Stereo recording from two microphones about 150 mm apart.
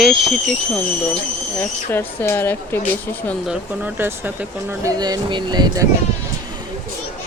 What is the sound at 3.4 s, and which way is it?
Speech, 10° right (ahead or behind).